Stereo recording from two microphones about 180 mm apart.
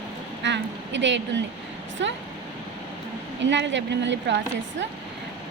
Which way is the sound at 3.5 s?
85° right.